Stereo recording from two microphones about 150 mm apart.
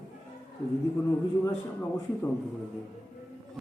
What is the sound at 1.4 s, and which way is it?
Speech, 15° left (ahead or behind).